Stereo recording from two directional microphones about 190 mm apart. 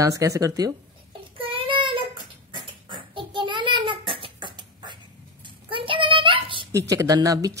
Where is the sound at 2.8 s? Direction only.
25° right (ahead or behind).